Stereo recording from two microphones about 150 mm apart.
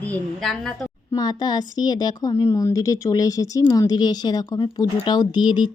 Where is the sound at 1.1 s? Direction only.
25° left (ahead or behind).